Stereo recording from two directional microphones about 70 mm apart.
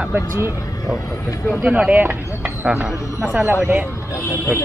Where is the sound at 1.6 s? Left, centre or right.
Centre.